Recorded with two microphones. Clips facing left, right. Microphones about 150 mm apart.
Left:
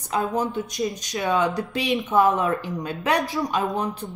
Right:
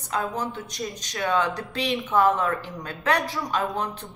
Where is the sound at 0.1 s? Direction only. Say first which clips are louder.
Left 4 dB; 15° left (ahead or behind).